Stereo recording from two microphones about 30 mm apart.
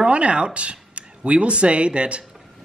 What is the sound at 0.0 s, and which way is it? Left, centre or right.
Speech, right.